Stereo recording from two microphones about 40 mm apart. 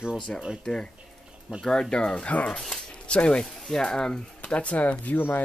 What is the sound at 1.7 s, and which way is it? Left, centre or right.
Speech, centre.